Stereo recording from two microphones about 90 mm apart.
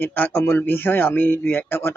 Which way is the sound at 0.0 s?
20° left (ahead or behind).